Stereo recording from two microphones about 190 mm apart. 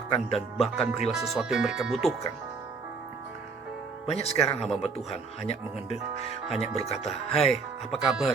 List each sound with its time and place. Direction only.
0.3 s speech: centre (ahead or behind)
4.0 s a man's voice: 30° left (ahead or behind)
8.0 s speech: centre (ahead or behind)